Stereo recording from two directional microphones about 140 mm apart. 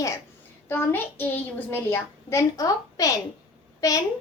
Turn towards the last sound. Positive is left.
turn(degrees=25)  # may be behind; listen again after turning